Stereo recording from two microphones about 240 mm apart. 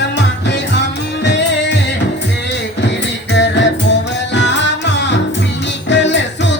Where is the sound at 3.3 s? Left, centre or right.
Left.